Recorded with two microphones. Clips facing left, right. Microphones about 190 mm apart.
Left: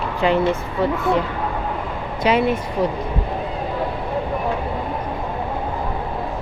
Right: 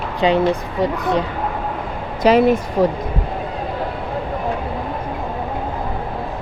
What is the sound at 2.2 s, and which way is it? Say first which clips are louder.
Speech: right 5 dB; 40° right (ahead or behind).